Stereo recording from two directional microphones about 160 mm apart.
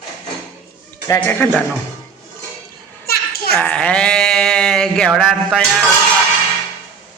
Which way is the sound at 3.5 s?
10° left (ahead or behind).